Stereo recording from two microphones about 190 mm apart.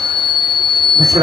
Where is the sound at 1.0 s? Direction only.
20° right (ahead or behind).